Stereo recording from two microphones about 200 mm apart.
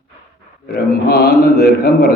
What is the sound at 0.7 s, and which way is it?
A man's voice, 50° left (ahead or behind).